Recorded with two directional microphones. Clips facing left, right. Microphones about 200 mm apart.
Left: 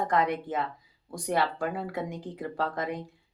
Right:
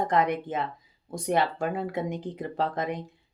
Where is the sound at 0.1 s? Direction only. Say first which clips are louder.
Right 2 dB; 20° right (ahead or behind).